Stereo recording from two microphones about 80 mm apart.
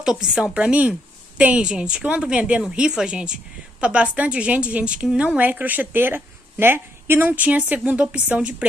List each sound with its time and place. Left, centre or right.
0.0 s a woman's voice: centre